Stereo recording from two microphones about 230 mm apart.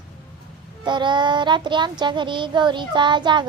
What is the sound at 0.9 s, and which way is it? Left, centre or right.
Speech, centre.